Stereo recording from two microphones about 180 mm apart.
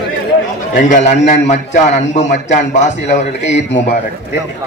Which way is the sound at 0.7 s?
45° left (ahead or behind).